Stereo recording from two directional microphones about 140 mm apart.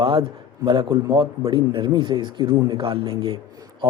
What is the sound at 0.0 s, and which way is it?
A man's voice, 35° right (ahead or behind).